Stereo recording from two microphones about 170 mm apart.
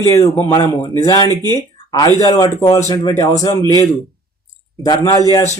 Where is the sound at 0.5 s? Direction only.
30° left (ahead or behind).